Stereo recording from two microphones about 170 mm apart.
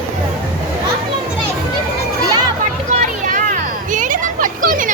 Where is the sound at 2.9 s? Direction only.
50° right (ahead or behind).